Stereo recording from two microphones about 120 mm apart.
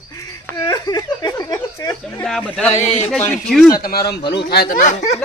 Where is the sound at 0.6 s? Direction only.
35° left (ahead or behind).